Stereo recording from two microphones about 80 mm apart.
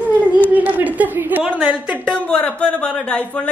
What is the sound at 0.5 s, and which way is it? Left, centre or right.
A woman's voice, right.